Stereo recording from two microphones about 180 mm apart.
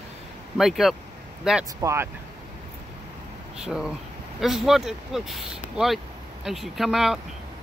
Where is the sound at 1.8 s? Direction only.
15° right (ahead or behind).